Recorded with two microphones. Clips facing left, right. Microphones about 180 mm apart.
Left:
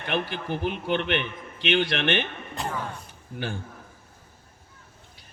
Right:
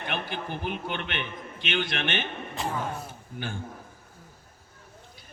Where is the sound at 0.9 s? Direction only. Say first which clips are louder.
Left 7 dB; 55° left (ahead or behind).